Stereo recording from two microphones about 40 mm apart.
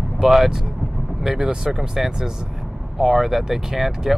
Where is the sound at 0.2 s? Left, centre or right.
Centre.